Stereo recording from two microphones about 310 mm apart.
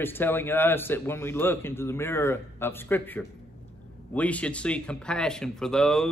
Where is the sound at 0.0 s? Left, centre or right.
Centre.